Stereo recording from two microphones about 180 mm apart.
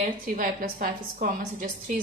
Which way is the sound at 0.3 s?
50° right (ahead or behind).